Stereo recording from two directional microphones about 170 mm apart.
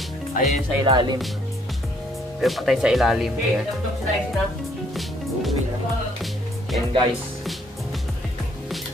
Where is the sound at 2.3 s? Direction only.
Centre (ahead or behind).